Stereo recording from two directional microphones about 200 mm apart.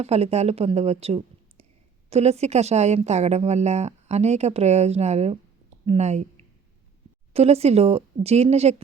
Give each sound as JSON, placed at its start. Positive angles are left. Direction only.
{"t": 0.0, "sound": "speech", "side_deg": -30}